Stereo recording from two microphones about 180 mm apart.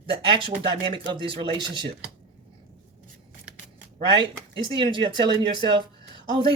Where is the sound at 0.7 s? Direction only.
25° right (ahead or behind).